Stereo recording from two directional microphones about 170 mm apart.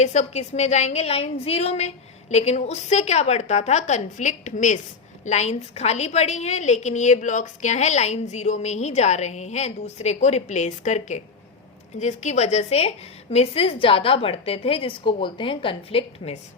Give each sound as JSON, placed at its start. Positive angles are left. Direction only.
{"t": 0.0, "sound": "a woman's voice", "side_deg": 45}